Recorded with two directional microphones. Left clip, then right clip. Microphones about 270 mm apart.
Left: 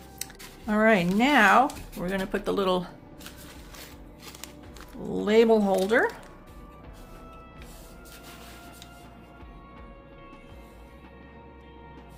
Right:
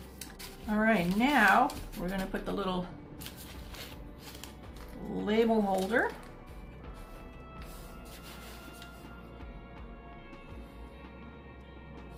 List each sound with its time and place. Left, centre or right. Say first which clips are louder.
0.7 s speech: left 7 dB; left
5.2 s speech: left 8 dB; left